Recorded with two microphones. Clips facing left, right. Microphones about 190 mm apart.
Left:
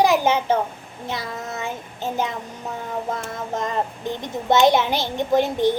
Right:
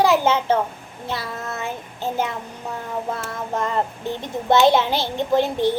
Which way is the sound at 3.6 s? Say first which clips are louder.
Right 2 dB; 15° left (ahead or behind).